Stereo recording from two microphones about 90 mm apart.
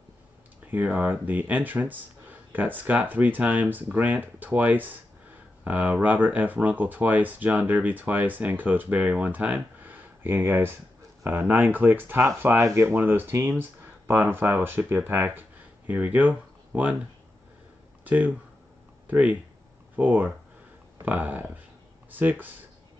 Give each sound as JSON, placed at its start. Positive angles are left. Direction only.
{"t": 0.7, "sound": "speech", "side_deg": -15}
{"t": 18.0, "sound": "speech", "side_deg": -20}